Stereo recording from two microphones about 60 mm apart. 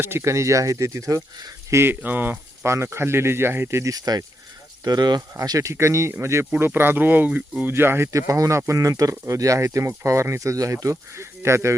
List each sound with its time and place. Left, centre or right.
0.0 s speech: right
1.9 s speech: right
2.6 s speech: right
3.8 s speech: right
5.4 s speech: right
5.7 s speech: right
6.6 s speech: right
8.1 s speech: right
10.8 s speech: right